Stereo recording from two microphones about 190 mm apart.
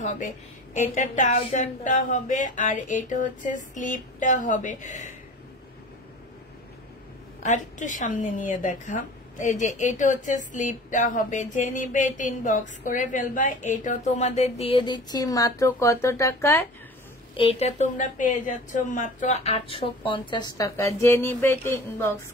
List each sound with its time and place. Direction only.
0.7 s a woman's voice: 40° left (ahead or behind)
1.4 s a sound: 40° left (ahead or behind)
7.4 s a woman's voice: 40° left (ahead or behind); by 16.6 s 15° left (ahead or behind)
17.3 s a woman's voice: 30° left (ahead or behind); by 22.1 s 10° left (ahead or behind)